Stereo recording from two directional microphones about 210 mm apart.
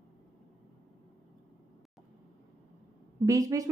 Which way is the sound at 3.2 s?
15° right (ahead or behind).